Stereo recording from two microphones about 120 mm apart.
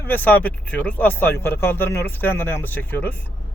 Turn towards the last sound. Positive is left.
turn(degrees=15)  # may be behind; listen again after turning